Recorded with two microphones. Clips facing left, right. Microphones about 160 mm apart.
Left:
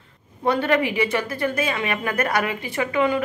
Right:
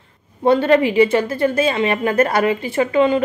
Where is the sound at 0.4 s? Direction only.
30° right (ahead or behind).